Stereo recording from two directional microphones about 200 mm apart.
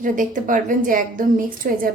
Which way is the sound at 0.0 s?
40° right (ahead or behind).